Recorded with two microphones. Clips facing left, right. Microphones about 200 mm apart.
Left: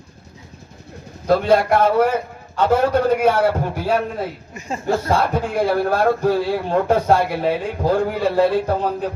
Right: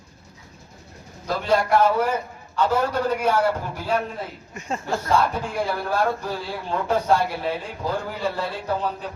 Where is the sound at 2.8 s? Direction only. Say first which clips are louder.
Left 7 dB; 55° left (ahead or behind).